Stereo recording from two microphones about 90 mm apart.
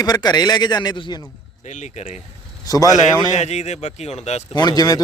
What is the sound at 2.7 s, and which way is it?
Speech, 45° left (ahead or behind).